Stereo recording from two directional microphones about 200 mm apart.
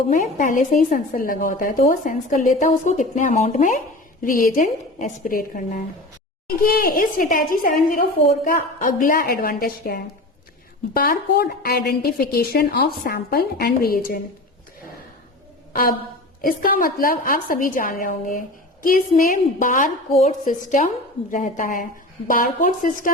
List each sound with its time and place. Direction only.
0.1 s a woman's voice: 40° left (ahead or behind)
15.7 s a woman's voice: 45° left (ahead or behind)